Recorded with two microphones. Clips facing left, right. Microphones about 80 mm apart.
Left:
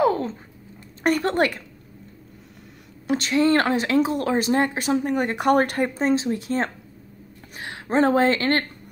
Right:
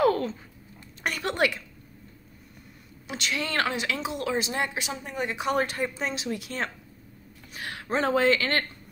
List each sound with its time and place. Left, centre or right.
0.0 s a sound: left
1.0 s speech: left
3.1 s speech: left
5.9 s speech: left
7.5 s a sound: left
7.9 s speech: left